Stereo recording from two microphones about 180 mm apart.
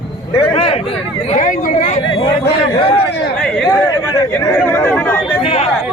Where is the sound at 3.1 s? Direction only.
70° left (ahead or behind).